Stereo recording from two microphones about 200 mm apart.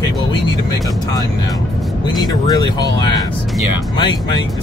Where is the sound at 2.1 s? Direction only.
20° left (ahead or behind).